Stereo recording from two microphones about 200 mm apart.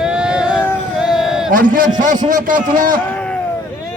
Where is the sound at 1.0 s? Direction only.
Centre (ahead or behind).